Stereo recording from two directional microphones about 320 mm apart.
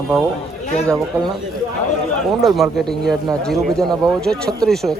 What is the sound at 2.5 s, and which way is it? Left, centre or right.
A man's voice, centre.